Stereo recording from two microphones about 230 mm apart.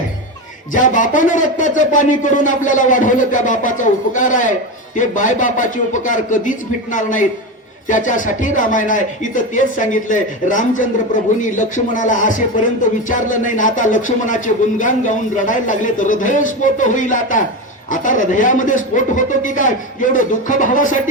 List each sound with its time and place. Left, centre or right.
0.7 s speech: left